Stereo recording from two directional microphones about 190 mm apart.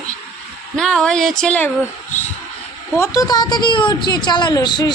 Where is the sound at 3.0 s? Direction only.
20° left (ahead or behind).